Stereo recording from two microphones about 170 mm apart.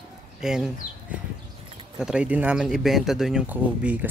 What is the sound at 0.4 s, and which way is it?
Speech, 5° right (ahead or behind).